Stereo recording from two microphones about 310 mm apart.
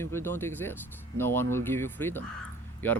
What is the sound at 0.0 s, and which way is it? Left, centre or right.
Speech, centre.